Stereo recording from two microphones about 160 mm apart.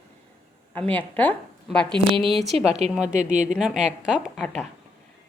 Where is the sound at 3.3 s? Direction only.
5° right (ahead or behind).